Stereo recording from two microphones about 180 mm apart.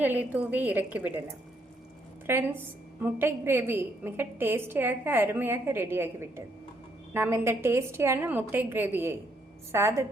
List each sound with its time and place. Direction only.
0.0 s a woman's voice: 10° right (ahead or behind)
2.2 s a woman's voice: 15° right (ahead or behind)